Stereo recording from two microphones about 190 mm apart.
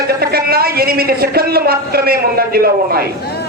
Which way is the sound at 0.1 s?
55° right (ahead or behind).